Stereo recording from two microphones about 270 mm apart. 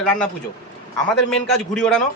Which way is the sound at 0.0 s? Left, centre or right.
Centre.